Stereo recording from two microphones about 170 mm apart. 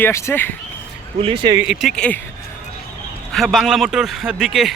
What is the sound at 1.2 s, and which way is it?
Speech, 30° right (ahead or behind).